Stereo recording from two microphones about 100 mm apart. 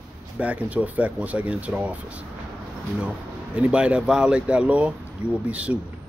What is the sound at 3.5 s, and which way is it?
Speech, 10° right (ahead or behind).